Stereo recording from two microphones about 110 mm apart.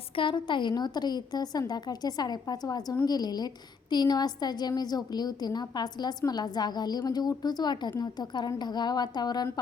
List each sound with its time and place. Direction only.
0.2 s a woman's voice: 45° left (ahead or behind)